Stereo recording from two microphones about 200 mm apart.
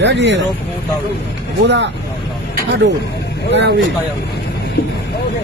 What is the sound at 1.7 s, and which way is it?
Speech, 60° right (ahead or behind).